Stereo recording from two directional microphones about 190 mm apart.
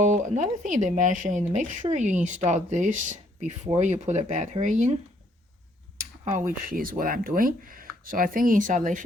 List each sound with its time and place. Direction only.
0.0 s speech: 40° right (ahead or behind)
6.0 s tick-tock: 40° right (ahead or behind)
6.7 s speech: 45° right (ahead or behind)